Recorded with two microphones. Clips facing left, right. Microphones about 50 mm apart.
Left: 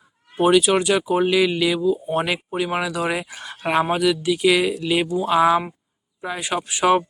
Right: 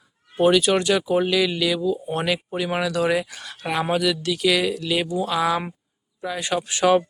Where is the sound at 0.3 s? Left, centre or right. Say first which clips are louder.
Left 1 dB; centre.